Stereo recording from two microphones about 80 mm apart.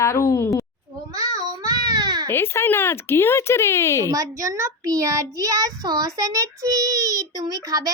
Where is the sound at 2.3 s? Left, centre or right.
Left.